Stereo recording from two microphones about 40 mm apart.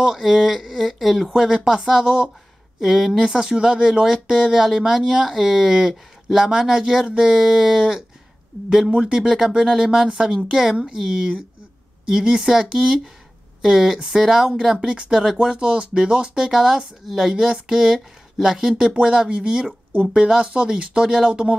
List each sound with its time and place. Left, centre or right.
0.2 s speech: centre
1.3 s speech: centre